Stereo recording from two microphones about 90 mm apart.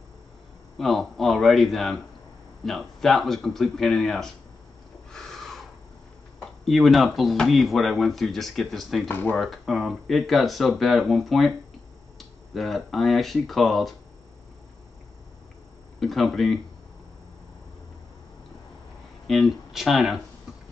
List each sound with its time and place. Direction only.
0.7 s speech: centre (ahead or behind)
5.1 s a sound: 5° left (ahead or behind)
6.6 s speech: centre (ahead or behind)
9.1 s speech: 25° left (ahead or behind)
9.4 s speech: centre (ahead or behind)
16.0 s speech: centre (ahead or behind)
19.2 s speech: centre (ahead or behind)